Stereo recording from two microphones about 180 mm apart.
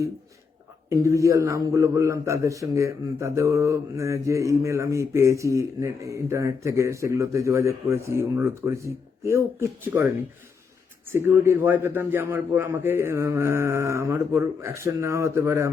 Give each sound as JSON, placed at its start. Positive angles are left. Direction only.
{"t": 0.9, "sound": "a man's voice", "side_deg": -15}